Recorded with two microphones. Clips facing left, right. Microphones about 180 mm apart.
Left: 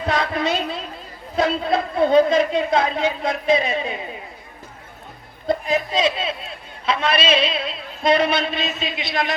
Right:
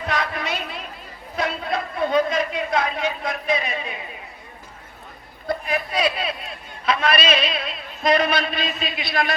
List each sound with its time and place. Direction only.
0.0 s a sound: 30° left (ahead or behind)
1.4 s a man's voice: 30° left (ahead or behind)
5.5 s a man's voice: 20° left (ahead or behind)